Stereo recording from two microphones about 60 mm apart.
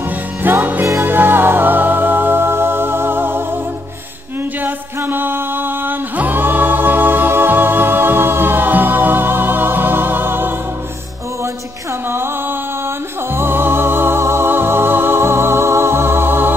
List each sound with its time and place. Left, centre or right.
0.4 s music: right
4.6 s music: right
12.1 s music: right